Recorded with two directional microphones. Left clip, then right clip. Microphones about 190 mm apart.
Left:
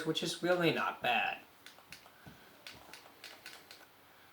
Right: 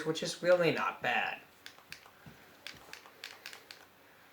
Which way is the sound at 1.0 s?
40° right (ahead or behind).